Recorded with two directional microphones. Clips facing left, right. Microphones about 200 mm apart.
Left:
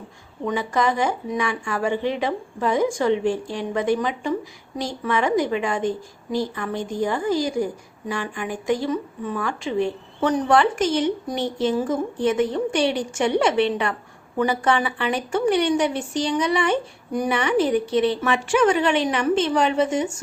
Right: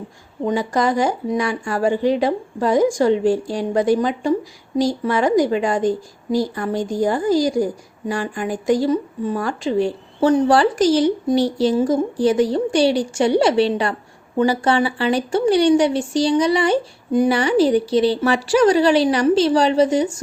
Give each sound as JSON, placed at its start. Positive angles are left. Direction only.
{"t": 0.4, "sound": "a woman's voice", "side_deg": -35}